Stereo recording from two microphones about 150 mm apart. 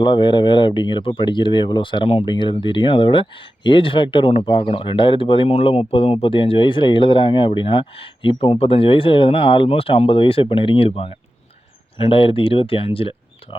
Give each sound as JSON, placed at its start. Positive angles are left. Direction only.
{"t": 0.0, "sound": "speech", "side_deg": 30}